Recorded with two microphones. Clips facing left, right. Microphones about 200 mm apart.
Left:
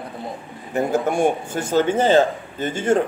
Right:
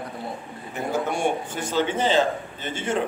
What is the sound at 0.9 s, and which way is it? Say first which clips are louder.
A man's voice: left 4 dB; 50° left (ahead or behind).